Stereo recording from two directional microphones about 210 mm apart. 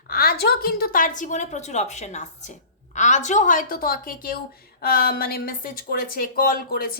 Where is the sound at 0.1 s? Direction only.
45° left (ahead or behind).